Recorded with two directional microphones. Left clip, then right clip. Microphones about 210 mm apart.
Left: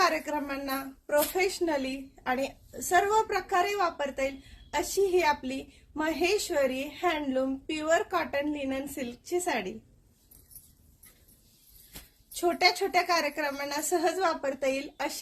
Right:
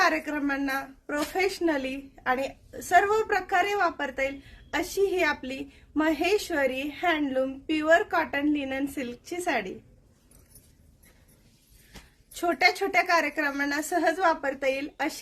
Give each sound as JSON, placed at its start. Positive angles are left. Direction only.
{"t": 0.0, "sound": "a woman's voice", "side_deg": -10}
{"t": 12.3, "sound": "a woman's voice", "side_deg": -15}